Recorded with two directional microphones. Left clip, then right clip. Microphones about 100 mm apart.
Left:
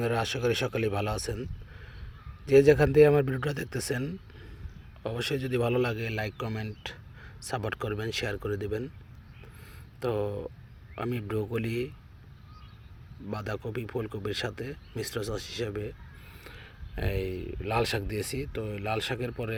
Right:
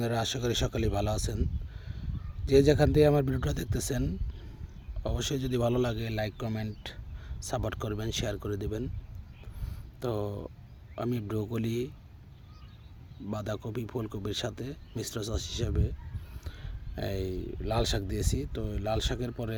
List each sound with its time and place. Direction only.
0.0 s speech: 35° right (ahead or behind)
2.5 s speech: 35° right (ahead or behind)
9.6 s a sound: 45° right (ahead or behind)
10.9 s speech: 40° right (ahead or behind)
13.3 s speech: 40° right (ahead or behind)